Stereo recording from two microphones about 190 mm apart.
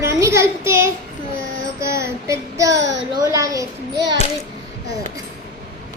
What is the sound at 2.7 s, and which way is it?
Speech, 70° right (ahead or behind).